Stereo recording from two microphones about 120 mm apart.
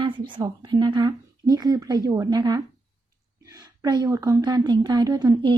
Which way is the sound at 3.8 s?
30° right (ahead or behind).